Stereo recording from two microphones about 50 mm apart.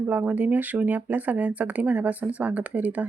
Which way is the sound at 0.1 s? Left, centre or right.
Right.